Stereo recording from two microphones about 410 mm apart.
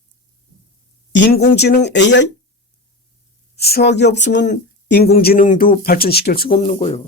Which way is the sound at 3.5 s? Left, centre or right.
Left.